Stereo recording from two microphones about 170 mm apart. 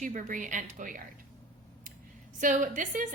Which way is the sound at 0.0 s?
50° right (ahead or behind).